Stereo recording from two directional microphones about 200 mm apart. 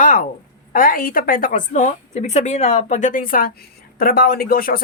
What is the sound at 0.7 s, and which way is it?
A woman's voice, 45° left (ahead or behind).